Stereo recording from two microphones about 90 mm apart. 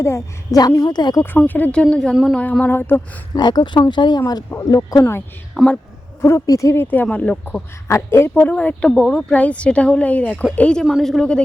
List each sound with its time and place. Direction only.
0.0 s a woman's voice: 35° left (ahead or behind)
0.9 s speech: 50° left (ahead or behind)
1.2 s speech: 20° left (ahead or behind)
3.3 s speech: 50° left (ahead or behind)
4.5 s a woman's voice: 35° left (ahead or behind)
5.6 s speech: 20° left (ahead or behind)
6.2 s a woman's voice: 35° left (ahead or behind)
6.8 s speech: 20° left (ahead or behind)
7.9 s speech: 25° left (ahead or behind)
8.3 s speech: 15° left (ahead or behind)
10.8 s speech: centre (ahead or behind)